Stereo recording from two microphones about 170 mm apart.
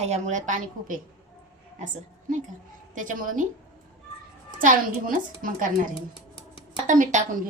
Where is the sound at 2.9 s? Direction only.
50° right (ahead or behind).